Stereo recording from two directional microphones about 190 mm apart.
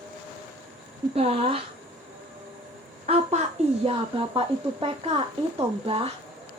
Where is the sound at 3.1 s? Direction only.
30° right (ahead or behind).